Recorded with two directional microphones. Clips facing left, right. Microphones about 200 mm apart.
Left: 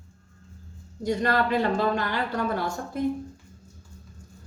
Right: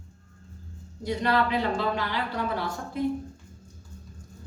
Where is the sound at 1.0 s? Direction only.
45° left (ahead or behind).